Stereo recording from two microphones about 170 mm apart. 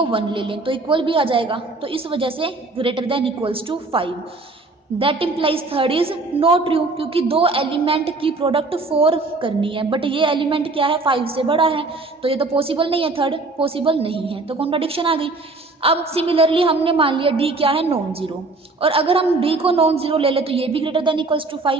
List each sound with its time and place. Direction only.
0.0 s a woman's voice: 30° right (ahead or behind)